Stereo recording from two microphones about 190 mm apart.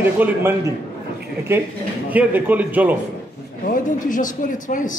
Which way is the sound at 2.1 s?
10° right (ahead or behind).